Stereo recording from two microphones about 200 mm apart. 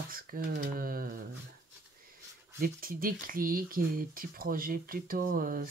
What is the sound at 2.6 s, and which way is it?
Speech, 45° right (ahead or behind).